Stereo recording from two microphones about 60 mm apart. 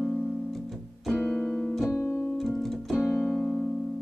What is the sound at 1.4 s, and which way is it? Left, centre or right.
Keyboard, centre.